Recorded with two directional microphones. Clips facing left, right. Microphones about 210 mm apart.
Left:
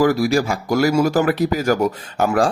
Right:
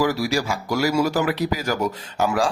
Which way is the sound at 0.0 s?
50° left (ahead or behind).